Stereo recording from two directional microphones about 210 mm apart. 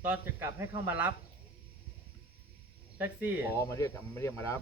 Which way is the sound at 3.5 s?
15° left (ahead or behind).